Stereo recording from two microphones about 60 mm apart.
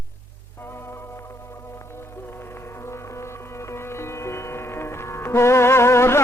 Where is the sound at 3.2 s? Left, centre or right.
Left.